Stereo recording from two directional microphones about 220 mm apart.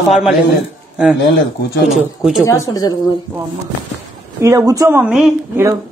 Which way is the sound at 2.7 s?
15° left (ahead or behind).